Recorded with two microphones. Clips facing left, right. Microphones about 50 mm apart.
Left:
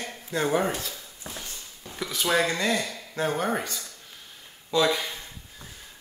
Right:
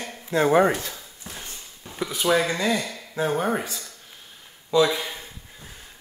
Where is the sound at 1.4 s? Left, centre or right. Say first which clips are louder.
Right 1 dB; right.